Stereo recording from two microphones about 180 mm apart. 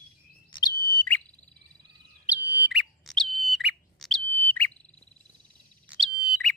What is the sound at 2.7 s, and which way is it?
Bird, centre (ahead or behind).